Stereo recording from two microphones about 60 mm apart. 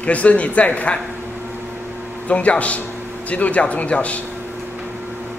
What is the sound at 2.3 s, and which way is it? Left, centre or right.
A man's voice, left.